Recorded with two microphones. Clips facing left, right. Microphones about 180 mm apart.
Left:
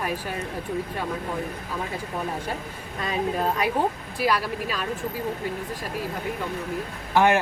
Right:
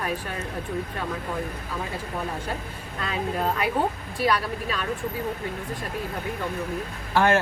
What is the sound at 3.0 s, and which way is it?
Speech, 15° left (ahead or behind).